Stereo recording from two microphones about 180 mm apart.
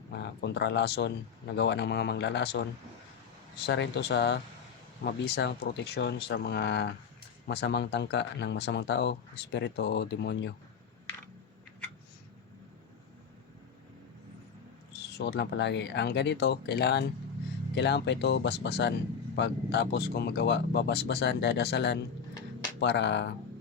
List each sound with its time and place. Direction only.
0.1 s speech: 70° left (ahead or behind)
3.7 s speech: 70° left (ahead or behind)
15.2 s speech: 70° left (ahead or behind)